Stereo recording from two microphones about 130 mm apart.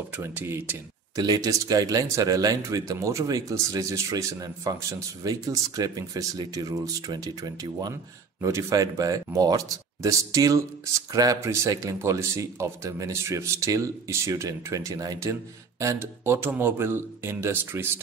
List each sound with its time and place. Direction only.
0.1 s speech: 15° right (ahead or behind)
1.2 s speech: 30° right (ahead or behind)